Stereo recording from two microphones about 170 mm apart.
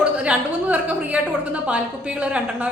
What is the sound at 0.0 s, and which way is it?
A woman's voice, 5° right (ahead or behind).